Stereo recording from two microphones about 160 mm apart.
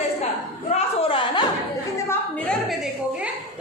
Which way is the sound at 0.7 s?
40° left (ahead or behind).